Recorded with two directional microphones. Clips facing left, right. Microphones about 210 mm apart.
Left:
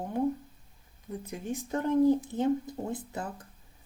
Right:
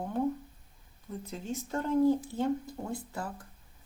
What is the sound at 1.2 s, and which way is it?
Speech, 15° left (ahead or behind).